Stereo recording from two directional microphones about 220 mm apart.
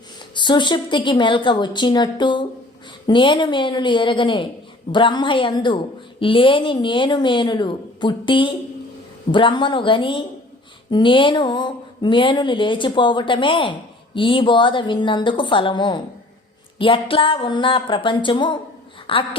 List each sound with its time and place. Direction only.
0.3 s a woman's voice: 20° left (ahead or behind)